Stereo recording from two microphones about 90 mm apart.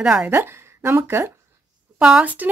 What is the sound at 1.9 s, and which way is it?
Speech, 10° right (ahead or behind).